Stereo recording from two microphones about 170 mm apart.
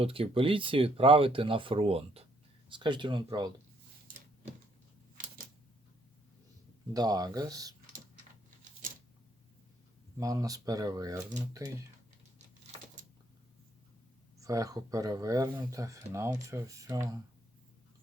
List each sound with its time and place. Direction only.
0.0 s speech: 30° right (ahead or behind)
6.9 s speech: 25° right (ahead or behind)
10.2 s speech: 20° right (ahead or behind)
14.4 s speech: 20° right (ahead or behind)